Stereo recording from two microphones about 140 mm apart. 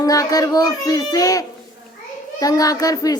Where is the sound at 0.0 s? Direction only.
25° left (ahead or behind).